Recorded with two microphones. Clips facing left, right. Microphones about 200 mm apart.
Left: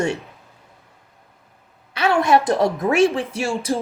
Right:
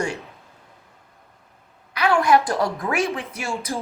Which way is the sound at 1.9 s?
25° left (ahead or behind).